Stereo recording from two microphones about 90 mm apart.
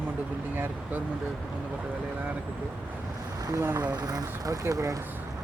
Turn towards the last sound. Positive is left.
turn(degrees=-35)  # may be behind; listen again after turning